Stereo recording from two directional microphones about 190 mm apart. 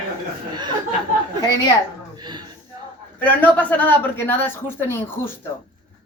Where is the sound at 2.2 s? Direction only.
25° right (ahead or behind).